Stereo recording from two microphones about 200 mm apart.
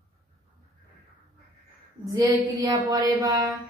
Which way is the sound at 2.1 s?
15° right (ahead or behind).